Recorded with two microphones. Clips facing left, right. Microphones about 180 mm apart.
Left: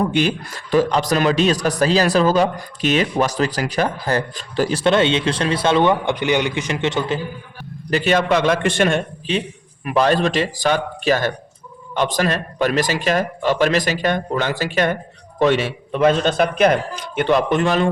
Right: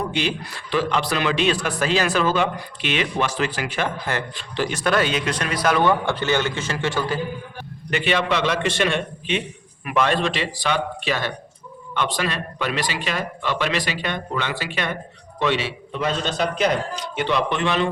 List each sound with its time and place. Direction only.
0.1 s a man's voice: 45° left (ahead or behind)
4.8 s a man's voice: 25° left (ahead or behind)
7.9 s speech: 40° left (ahead or behind)